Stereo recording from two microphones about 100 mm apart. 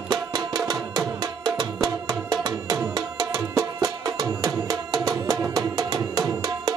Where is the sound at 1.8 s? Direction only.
40° right (ahead or behind).